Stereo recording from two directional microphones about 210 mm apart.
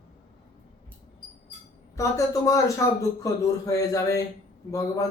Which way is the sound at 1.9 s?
15° left (ahead or behind).